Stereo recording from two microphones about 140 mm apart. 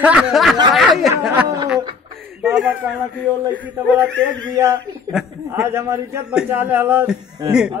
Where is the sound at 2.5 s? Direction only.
5° right (ahead or behind).